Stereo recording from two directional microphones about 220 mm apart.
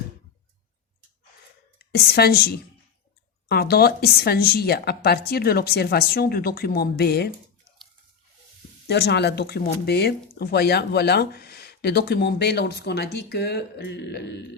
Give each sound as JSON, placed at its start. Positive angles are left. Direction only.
{"t": 1.8, "sound": "a woman's voice", "side_deg": 45}
{"t": 8.9, "sound": "speech", "side_deg": 50}